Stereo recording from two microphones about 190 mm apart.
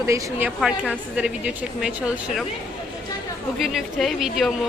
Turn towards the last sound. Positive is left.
turn(degrees=0)  # may be behind; listen again after turning